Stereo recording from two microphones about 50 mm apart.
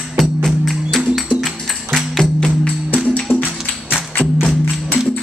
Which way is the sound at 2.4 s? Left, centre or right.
Centre.